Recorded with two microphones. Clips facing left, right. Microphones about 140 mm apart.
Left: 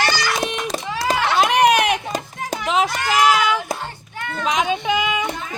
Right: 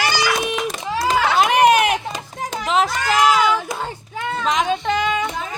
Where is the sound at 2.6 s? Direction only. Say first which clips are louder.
Right 1 dB; centre (ahead or behind).